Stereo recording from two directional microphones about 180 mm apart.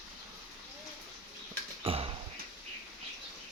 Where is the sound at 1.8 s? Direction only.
30° right (ahead or behind).